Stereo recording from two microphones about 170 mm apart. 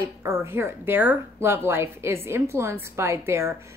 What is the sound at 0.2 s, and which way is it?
Speech, 15° right (ahead or behind).